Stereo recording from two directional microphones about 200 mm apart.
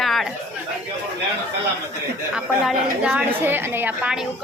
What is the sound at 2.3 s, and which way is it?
A woman's voice, 5° right (ahead or behind).